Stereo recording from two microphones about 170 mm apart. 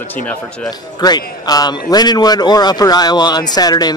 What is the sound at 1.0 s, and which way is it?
A man's voice, 20° left (ahead or behind).